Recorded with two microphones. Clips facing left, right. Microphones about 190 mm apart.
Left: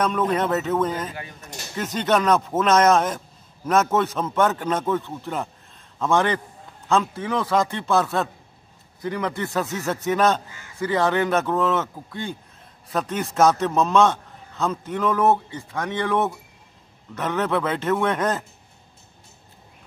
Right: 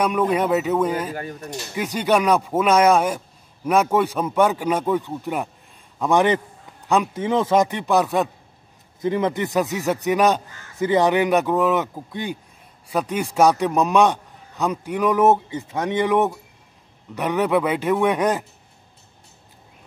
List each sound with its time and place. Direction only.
0.0 s a man's voice: 10° right (ahead or behind)
1.1 s speech: 45° right (ahead or behind)
1.8 s a man's voice: 10° right (ahead or behind)